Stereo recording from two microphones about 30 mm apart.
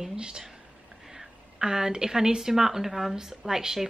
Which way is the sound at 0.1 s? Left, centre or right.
Right.